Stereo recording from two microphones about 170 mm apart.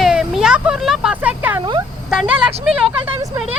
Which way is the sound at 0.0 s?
5° right (ahead or behind).